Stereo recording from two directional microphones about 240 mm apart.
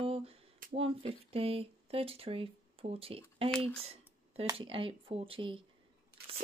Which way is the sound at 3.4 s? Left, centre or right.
Centre.